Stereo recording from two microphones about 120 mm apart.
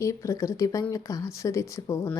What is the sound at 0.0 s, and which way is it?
Speech, 25° left (ahead or behind).